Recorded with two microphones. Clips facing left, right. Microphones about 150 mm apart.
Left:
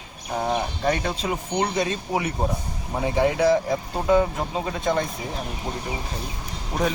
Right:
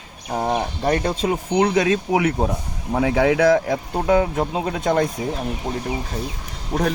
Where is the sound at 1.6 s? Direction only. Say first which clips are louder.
Right 7 dB; 75° right (ahead or behind); by 5.1 s 55° right (ahead or behind).